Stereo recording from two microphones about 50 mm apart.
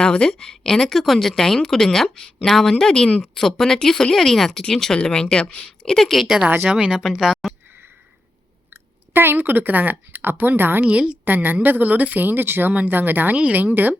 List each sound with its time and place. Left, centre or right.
0.0 s a woman's voice: centre
5.8 s a woman's voice: centre
6.2 s speech: centre
8.7 s speech: right
10.8 s a woman's voice: right
11.3 s speech: right
13.3 s a woman's voice: right
13.6 s speech: right